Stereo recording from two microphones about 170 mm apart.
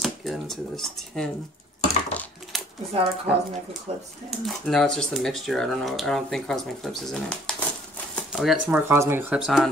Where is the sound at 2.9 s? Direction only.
35° right (ahead or behind).